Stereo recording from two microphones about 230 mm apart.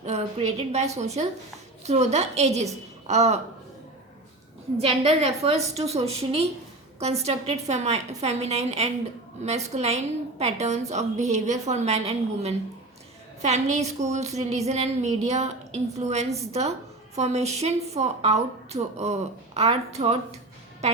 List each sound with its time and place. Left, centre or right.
0.0 s a woman's voice: right
4.8 s a woman's voice: right